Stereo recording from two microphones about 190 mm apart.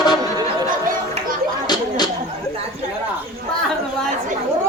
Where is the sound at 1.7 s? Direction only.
20° left (ahead or behind).